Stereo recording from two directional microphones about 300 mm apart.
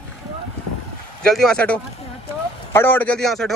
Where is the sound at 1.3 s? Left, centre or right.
Centre.